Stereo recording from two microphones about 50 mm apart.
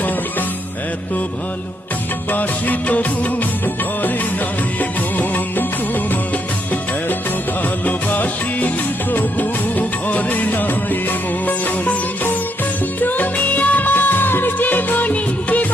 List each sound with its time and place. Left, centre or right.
2.3 s music of bollywood: left
7.6 s music: left
13.0 s music: left